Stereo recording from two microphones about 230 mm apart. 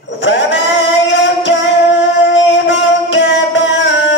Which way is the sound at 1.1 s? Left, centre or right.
Left.